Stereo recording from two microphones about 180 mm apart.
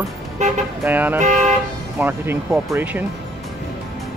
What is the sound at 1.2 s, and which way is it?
Vehicle, 40° right (ahead or behind).